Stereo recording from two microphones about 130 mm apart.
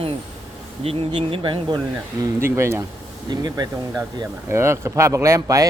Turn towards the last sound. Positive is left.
turn(degrees=-25)  # may be behind; listen again after turning